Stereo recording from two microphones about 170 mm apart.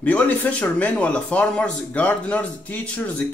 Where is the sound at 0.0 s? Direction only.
10° left (ahead or behind).